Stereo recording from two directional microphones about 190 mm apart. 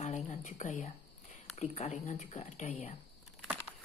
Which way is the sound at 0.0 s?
40° left (ahead or behind).